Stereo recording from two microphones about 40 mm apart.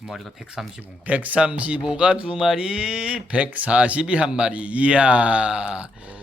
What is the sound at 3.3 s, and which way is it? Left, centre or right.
Speech, right.